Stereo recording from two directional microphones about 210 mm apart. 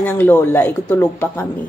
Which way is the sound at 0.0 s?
10° left (ahead or behind).